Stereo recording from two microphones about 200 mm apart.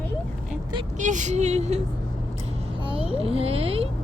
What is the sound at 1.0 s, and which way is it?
Speech, 40° right (ahead or behind).